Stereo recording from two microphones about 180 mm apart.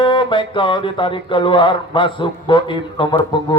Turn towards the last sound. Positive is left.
turn(degrees=25)  # may be behind; listen again after turning